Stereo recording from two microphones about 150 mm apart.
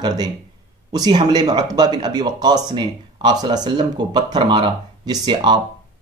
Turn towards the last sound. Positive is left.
turn(degrees=-30)  # may be behind; listen again after turning